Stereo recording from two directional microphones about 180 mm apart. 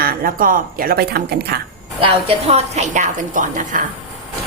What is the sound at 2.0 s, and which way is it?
A woman's voice, 35° right (ahead or behind).